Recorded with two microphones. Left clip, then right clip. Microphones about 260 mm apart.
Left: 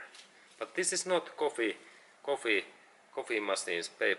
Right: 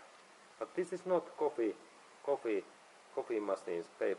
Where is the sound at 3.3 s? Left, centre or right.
Centre.